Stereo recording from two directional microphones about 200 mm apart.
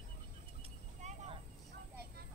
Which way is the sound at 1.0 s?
35° right (ahead or behind).